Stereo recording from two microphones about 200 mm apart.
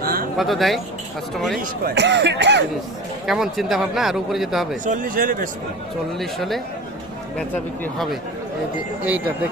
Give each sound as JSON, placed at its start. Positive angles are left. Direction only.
{"t": 0.0, "sound": "a sound", "side_deg": -45}
{"t": 0.3, "sound": "a man's voice", "side_deg": 0}
{"t": 1.8, "sound": "speech", "side_deg": -60}
{"t": 3.2, "sound": "a man's voice", "side_deg": 0}
{"t": 4.9, "sound": "speech", "side_deg": -40}
{"t": 6.1, "sound": "a man's voice", "side_deg": 0}
{"t": 9.0, "sound": "speech", "side_deg": -10}